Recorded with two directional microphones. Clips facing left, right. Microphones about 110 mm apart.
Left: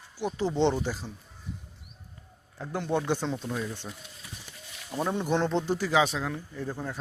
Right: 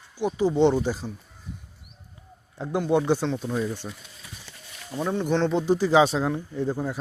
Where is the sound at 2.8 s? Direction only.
10° right (ahead or behind).